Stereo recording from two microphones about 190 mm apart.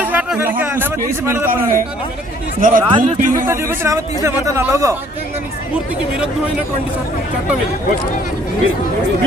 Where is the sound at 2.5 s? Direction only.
45° right (ahead or behind).